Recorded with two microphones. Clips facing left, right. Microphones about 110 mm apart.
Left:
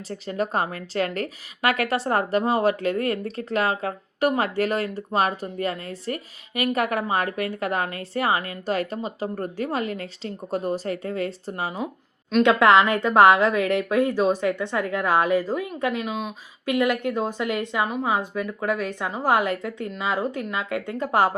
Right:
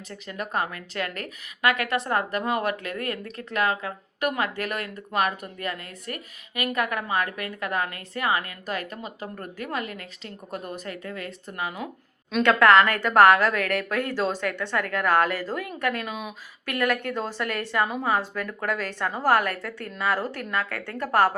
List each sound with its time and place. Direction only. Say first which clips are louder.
0.1 s a woman's voice: left 5 dB; 35° left (ahead or behind)
12.5 s a woman's voice: even; 15° left (ahead or behind)
13.0 s a woman's voice: left 1 dB; 20° left (ahead or behind)